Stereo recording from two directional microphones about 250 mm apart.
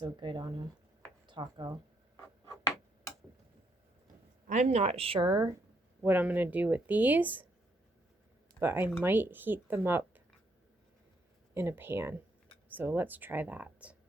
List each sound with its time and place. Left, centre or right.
0.0 s speech: centre
4.4 s speech: right; by 7.4 s centre
8.5 s speech: centre
11.5 s speech: centre